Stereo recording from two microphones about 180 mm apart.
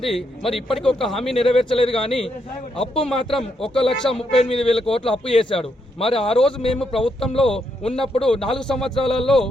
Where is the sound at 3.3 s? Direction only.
Centre (ahead or behind).